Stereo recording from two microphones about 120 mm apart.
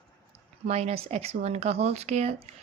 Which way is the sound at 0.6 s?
60° right (ahead or behind).